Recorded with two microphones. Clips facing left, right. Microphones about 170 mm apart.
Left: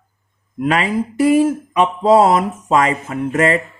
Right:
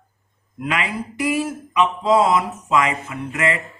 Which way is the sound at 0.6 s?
40° left (ahead or behind).